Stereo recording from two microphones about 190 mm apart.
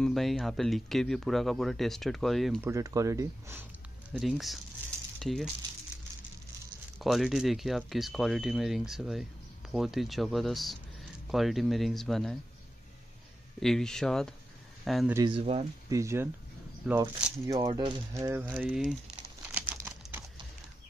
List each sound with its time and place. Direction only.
0.0 s speech: centre (ahead or behind)
2.6 s speech: 15° right (ahead or behind)
4.1 s speech: centre (ahead or behind)
7.0 s speech: centre (ahead or behind)
13.6 s speech: centre (ahead or behind)
15.1 s speech: 25° right (ahead or behind)
15.9 s speech: 15° right (ahead or behind)
16.8 s speech: 5° right (ahead or behind)
17.6 s speech: 25° right (ahead or behind); by 18.9 s 5° right (ahead or behind)
19.5 s crumpling: 10° right (ahead or behind)